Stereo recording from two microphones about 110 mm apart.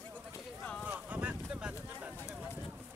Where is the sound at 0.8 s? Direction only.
15° right (ahead or behind).